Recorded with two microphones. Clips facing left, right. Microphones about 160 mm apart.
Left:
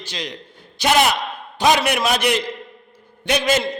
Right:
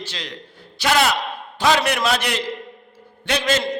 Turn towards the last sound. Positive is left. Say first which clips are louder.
# left 2 dB
turn(degrees=15)  # may be behind; listen again after turning